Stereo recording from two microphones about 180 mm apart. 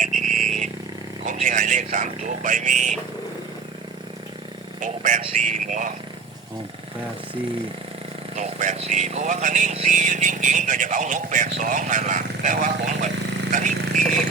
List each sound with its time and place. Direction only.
0.0 s vehicle: 45° right (ahead or behind)
1.2 s a man's voice: 45° right (ahead or behind)
4.8 s a man's voice: 45° right (ahead or behind)
8.4 s a man's voice: 45° right (ahead or behind)
13.5 s a sound: 45° right (ahead or behind)